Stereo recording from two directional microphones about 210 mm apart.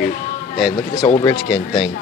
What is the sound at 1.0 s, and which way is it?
Speech, 10° left (ahead or behind).